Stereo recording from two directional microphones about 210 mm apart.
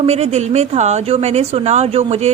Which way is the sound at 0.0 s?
30° right (ahead or behind).